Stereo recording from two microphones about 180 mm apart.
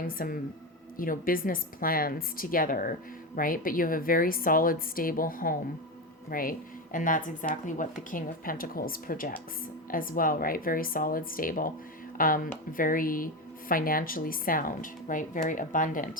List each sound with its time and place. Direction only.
0.2 s speech: 50° left (ahead or behind)